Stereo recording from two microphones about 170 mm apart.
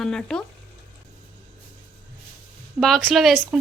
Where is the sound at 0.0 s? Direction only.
5° left (ahead or behind).